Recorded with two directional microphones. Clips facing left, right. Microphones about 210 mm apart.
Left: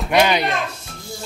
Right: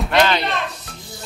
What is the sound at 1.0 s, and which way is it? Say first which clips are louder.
Music: left 4 dB; centre (ahead or behind).